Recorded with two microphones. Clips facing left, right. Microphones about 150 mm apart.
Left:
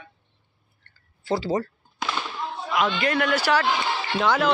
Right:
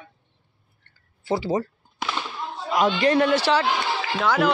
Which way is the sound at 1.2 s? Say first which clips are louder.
Right 1 dB; 15° right (ahead or behind).